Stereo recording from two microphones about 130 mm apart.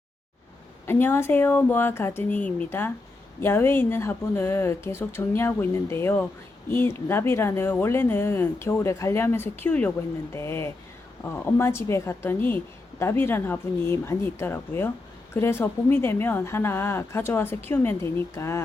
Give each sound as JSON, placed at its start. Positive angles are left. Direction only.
{"t": 0.9, "sound": "speech", "side_deg": 15}